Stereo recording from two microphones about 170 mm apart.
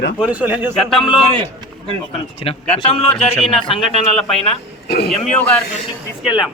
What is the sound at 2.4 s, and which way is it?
Speech, 35° left (ahead or behind).